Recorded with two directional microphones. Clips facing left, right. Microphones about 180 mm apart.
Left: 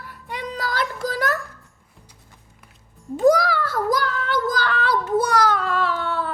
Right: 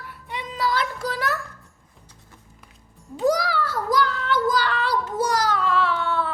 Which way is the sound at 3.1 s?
50° left (ahead or behind).